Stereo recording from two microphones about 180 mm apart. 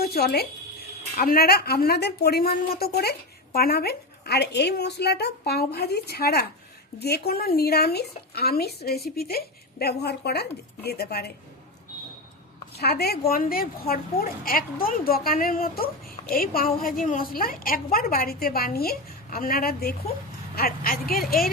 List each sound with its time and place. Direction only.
0.0 s a woman's voice: 60° left (ahead or behind)
12.7 s a woman's voice: 60° left (ahead or behind)